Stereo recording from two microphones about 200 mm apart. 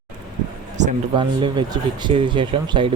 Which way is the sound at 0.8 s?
35° right (ahead or behind).